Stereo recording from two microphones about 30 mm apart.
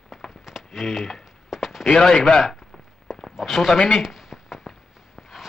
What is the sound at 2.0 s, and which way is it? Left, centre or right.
Speech, centre.